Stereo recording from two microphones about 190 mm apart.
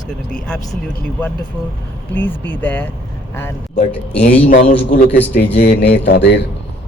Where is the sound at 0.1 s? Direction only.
5° left (ahead or behind).